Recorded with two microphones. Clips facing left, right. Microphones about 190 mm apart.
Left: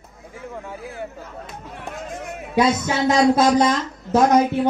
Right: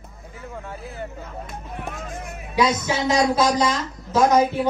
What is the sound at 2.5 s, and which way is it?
Speech, 55° left (ahead or behind).